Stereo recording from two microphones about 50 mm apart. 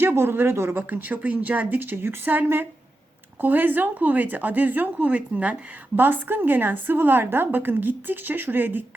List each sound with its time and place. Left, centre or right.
0.0 s a woman's voice: right
0.8 s speech: right
6.0 s a woman's voice: right